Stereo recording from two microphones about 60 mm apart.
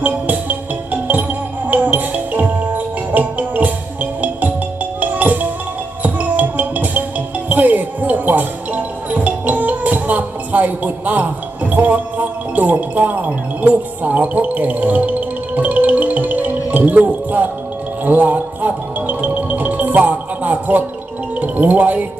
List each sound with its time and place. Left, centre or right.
0.0 s music: right